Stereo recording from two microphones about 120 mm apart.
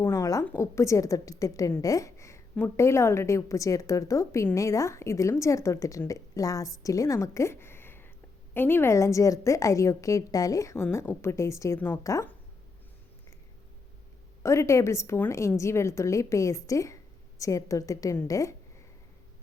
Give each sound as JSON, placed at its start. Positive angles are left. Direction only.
{"t": 0.0, "sound": "a sound", "side_deg": 25}
{"t": 0.4, "sound": "a woman's voice", "side_deg": 20}
{"t": 14.4, "sound": "a woman's voice", "side_deg": 25}